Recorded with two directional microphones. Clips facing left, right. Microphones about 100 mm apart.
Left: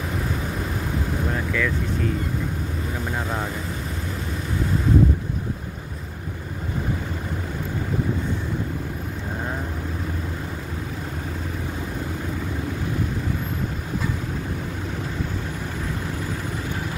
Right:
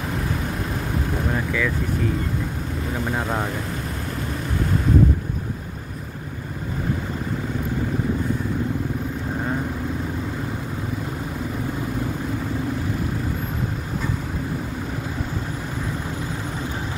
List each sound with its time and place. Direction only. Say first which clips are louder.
1.3 s vehicle: right 1 dB; 5° right (ahead or behind)